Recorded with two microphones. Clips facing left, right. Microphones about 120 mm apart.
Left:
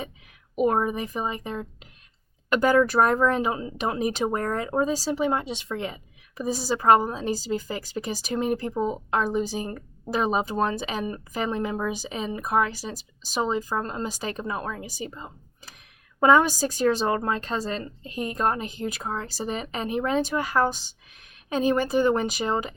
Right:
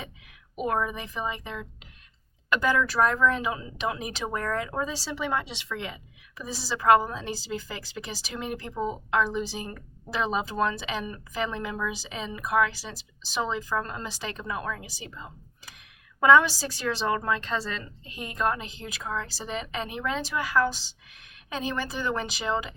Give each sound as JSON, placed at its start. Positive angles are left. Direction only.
{"t": 0.6, "sound": "a woman's voice", "side_deg": 35}
{"t": 14.1, "sound": "a woman's voice", "side_deg": 45}